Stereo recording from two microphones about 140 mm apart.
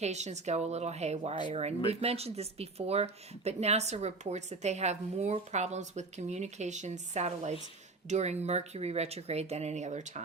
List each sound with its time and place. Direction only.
0.0 s speech: 55° right (ahead or behind)